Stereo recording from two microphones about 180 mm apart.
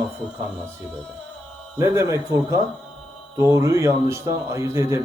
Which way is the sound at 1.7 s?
15° right (ahead or behind).